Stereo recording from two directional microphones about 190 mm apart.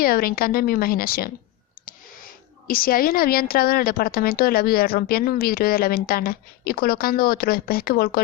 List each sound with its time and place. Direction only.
0.0 s speech: 50° left (ahead or behind)